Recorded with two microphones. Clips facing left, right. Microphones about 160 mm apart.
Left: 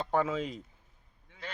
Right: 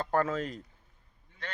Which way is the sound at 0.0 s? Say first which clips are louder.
Right 1 dB; centre (ahead or behind).